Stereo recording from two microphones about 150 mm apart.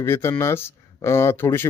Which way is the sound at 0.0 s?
15° left (ahead or behind).